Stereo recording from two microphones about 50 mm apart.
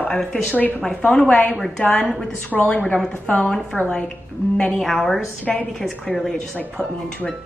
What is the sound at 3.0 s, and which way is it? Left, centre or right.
Speech, left.